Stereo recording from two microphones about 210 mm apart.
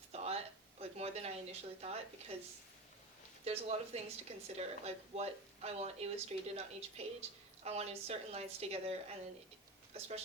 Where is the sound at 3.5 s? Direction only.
30° right (ahead or behind).